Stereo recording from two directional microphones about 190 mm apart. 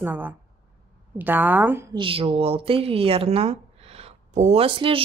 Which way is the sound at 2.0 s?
25° right (ahead or behind).